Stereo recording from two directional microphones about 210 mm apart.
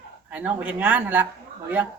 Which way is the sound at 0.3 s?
5° right (ahead or behind).